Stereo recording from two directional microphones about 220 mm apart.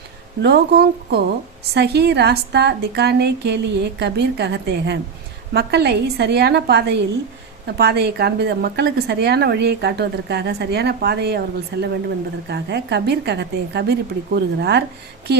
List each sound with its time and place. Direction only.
0.4 s a woman's voice: 45° right (ahead or behind)